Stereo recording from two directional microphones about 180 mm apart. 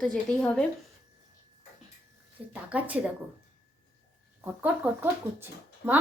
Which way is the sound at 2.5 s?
5° right (ahead or behind).